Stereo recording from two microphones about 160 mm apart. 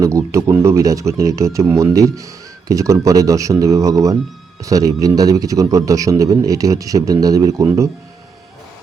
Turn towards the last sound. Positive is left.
turn(degrees=-20)  # may be behind; listen again after turning